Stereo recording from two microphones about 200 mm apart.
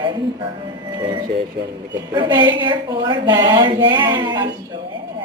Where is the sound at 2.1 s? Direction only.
25° right (ahead or behind).